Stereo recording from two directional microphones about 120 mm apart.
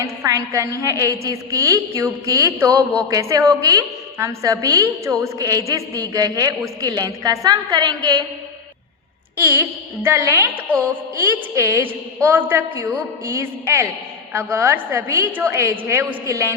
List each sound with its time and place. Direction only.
0.0 s a woman's voice: 25° right (ahead or behind)
9.4 s a woman's voice: 20° right (ahead or behind)
11.5 s a woman's voice: 20° right (ahead or behind)